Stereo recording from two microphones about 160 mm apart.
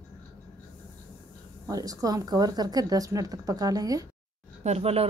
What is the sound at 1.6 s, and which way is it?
Speech, 20° right (ahead or behind).